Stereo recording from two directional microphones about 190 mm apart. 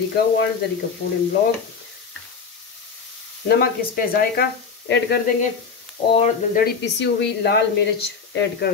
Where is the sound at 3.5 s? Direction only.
55° left (ahead or behind).